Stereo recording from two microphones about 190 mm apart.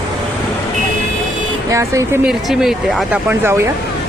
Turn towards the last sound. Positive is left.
turn(degrees=-15)  # may be behind; listen again after turning